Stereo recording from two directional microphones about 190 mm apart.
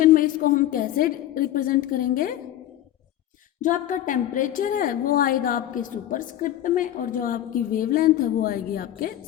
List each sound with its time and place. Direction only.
0.0 s a woman's voice: 45° left (ahead or behind)
3.6 s a woman's voice: 45° left (ahead or behind)